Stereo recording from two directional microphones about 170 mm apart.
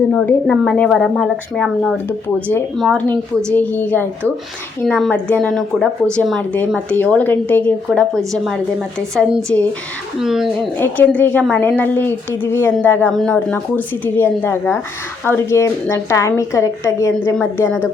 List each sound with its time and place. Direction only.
0.1 s a woman's voice: 5° left (ahead or behind)
2.0 s a woman's voice: 10° left (ahead or behind)
10.8 s a woman's voice: 10° left (ahead or behind)